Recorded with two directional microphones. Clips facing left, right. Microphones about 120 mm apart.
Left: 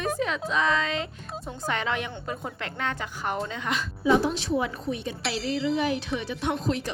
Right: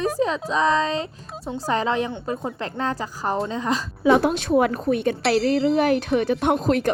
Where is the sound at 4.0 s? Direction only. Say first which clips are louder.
Right 5 dB; 65° right (ahead or behind).